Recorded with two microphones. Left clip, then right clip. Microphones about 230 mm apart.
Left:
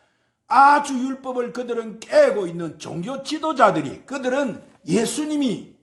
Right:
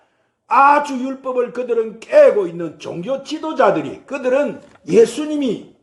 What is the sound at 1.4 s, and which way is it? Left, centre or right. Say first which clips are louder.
A man's voice: right 8 dB; left.